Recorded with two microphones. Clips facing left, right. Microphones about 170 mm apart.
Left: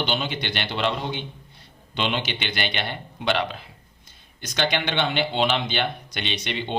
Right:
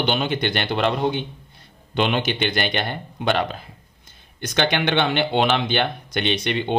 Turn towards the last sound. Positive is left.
turn(degrees=-55)  # may be behind; listen again after turning